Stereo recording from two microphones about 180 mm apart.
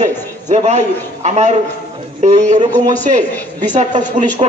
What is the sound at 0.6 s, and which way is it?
A man's voice, 40° right (ahead or behind).